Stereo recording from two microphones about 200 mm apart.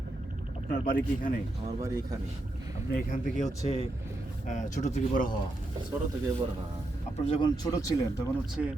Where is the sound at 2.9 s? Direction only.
40° left (ahead or behind).